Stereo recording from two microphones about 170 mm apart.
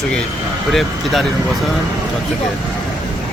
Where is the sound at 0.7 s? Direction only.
Centre (ahead or behind).